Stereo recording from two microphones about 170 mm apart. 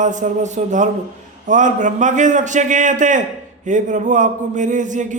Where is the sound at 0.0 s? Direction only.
45° right (ahead or behind).